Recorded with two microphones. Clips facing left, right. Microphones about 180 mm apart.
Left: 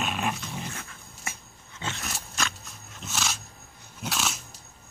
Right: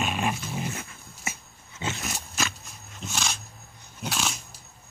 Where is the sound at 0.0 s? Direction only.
Centre (ahead or behind).